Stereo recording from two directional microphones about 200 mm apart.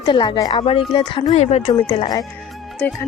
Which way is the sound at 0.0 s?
20° left (ahead or behind).